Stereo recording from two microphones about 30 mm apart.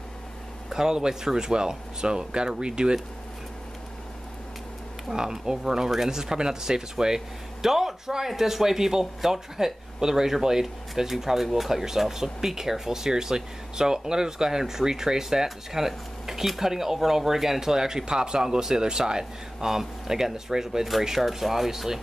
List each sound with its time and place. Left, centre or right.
0.7 s speech: right
5.1 s speech: centre
11.7 s speech: centre